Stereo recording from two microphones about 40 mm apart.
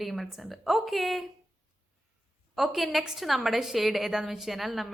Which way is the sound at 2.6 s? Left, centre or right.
Centre.